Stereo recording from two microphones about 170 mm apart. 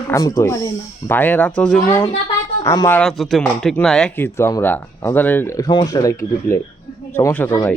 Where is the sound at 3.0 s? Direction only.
Centre (ahead or behind).